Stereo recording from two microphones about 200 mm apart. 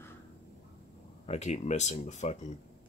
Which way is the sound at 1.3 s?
35° left (ahead or behind).